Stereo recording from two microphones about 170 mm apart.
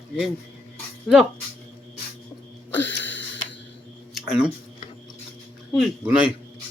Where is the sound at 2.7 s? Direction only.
10° left (ahead or behind).